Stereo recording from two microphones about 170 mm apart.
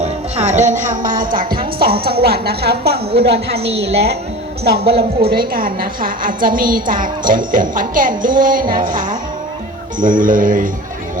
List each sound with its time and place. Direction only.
0.0 s a woman's voice: 40° right (ahead or behind); by 3.4 s 75° right (ahead or behind)
3.5 s a woman's voice: 35° right (ahead or behind)
4.6 s speech: 75° right (ahead or behind)
5.3 s a woman's voice: 60° right (ahead or behind)